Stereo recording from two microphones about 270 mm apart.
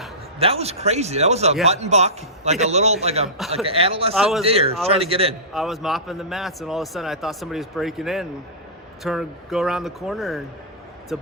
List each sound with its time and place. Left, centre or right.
0.3 s a man's voice: right
3.2 s a man's voice: centre
3.5 s a man's voice: right
4.1 s a man's voice: centre
4.4 s a man's voice: right
5.5 s a man's voice: centre